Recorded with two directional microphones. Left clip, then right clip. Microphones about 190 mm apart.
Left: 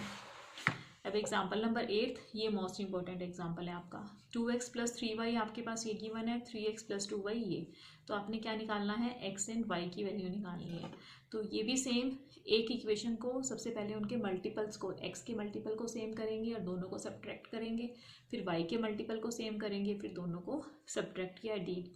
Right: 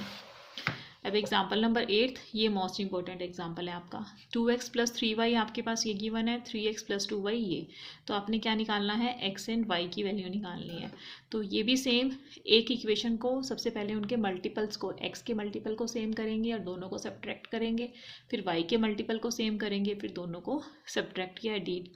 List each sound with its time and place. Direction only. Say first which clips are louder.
1.0 s speech: right 6 dB; 45° right (ahead or behind)